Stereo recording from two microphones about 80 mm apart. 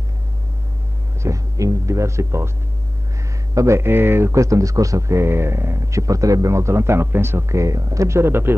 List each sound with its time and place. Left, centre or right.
1.2 s speech: right
3.5 s speech: right